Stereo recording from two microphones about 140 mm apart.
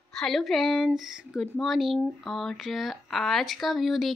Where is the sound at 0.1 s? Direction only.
Centre (ahead or behind).